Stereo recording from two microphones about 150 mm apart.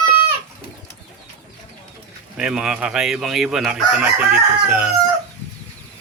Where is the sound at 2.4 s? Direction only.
5° right (ahead or behind).